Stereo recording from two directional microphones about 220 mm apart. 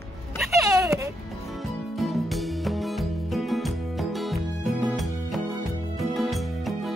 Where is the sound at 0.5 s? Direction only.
15° right (ahead or behind).